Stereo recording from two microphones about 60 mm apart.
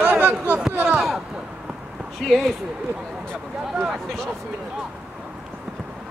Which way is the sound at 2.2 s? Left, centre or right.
Centre.